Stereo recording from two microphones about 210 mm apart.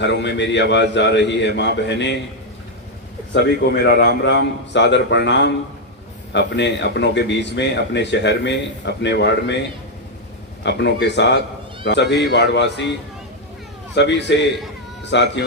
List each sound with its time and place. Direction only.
0.0 s speech: 55° left (ahead or behind)
3.3 s speech: 50° left (ahead or behind)
13.9 s speech: 55° left (ahead or behind)